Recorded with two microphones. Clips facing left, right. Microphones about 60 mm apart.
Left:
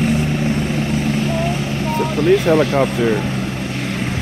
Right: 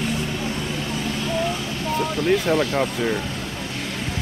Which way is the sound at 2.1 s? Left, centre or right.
Left.